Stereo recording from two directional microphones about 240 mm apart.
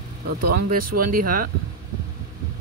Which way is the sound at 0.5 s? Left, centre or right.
Right.